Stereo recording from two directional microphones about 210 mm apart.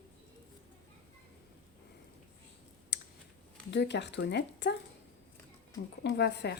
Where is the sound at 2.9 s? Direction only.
55° left (ahead or behind).